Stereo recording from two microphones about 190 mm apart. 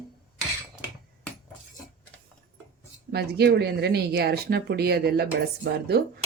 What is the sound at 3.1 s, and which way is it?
Speech, 60° right (ahead or behind).